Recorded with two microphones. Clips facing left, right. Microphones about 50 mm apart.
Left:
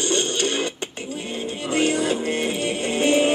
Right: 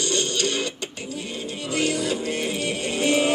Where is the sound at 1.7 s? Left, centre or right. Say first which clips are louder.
Left 3 dB; left.